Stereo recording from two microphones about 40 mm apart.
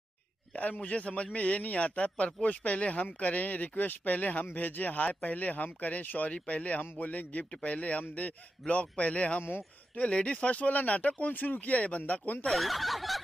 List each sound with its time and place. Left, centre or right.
0.7 s speech: left
12.5 s speech: centre